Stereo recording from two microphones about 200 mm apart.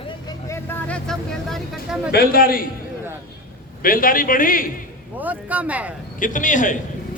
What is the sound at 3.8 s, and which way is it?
Speech, 45° left (ahead or behind).